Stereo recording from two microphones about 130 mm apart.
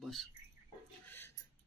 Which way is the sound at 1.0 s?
15° left (ahead or behind).